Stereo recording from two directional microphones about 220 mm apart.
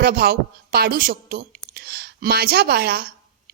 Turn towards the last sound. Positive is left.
turn(degrees=-45)  # may be behind; listen again after turning